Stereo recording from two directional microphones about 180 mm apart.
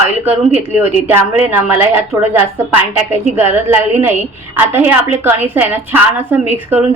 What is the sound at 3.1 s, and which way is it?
Speech, 15° right (ahead or behind).